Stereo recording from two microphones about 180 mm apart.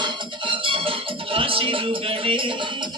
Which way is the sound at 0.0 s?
30° right (ahead or behind).